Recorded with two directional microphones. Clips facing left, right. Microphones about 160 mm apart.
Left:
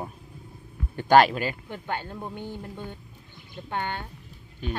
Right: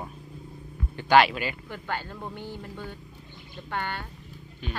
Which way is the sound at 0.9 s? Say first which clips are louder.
Left 2 dB; 45° left (ahead or behind).